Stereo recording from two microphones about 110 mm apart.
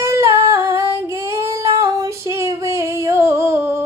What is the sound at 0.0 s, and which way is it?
Female singing, 25° right (ahead or behind).